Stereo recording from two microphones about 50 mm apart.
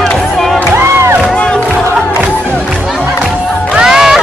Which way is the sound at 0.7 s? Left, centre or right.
Right.